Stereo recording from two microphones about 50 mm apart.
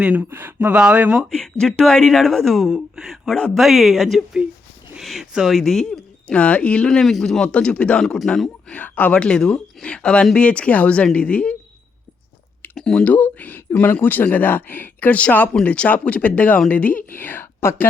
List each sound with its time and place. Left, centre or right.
0.3 s speech: right
0.7 s speech: right
1.3 s speech: centre
5.8 s speech: left
7.0 s speech: centre
7.4 s speech: left
9.1 s speech: centre
12.7 s a sound: centre
13.1 s speech: left
15.6 s a woman's voice: left